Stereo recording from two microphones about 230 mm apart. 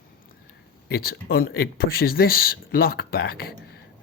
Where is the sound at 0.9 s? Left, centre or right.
Left.